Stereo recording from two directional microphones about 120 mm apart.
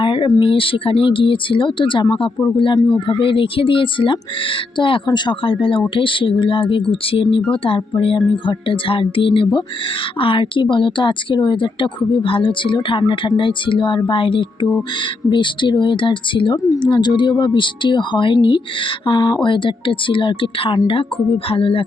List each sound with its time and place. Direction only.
0.0 s speech: 45° left (ahead or behind)